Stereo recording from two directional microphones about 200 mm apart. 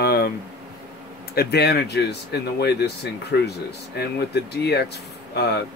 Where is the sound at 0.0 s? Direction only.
50° left (ahead or behind).